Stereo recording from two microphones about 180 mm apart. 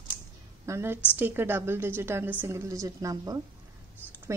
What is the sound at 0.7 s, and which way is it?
A woman's voice, 15° right (ahead or behind).